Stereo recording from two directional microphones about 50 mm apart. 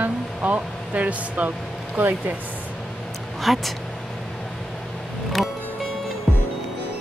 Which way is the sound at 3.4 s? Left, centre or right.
Centre.